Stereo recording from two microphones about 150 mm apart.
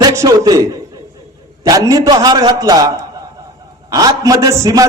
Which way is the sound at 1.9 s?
25° right (ahead or behind).